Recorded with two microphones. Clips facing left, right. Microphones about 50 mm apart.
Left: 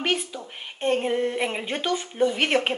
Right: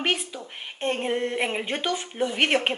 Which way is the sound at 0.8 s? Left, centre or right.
Centre.